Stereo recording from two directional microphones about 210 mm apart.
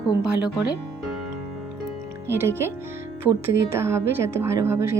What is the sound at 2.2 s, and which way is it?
Speech, 10° right (ahead or behind).